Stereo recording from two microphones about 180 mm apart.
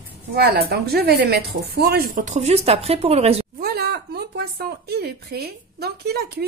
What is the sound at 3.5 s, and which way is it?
Speech, 60° right (ahead or behind).